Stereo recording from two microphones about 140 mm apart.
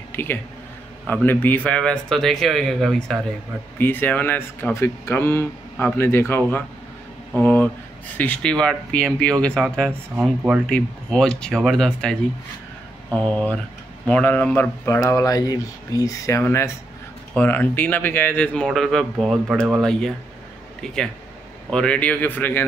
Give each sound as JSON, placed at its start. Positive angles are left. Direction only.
{"t": 0.1, "sound": "speech", "side_deg": 15}
{"t": 3.7, "sound": "speech", "side_deg": 15}
{"t": 21.6, "sound": "speech", "side_deg": 5}